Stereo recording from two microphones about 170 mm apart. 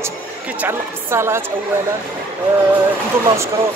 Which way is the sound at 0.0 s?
10° right (ahead or behind).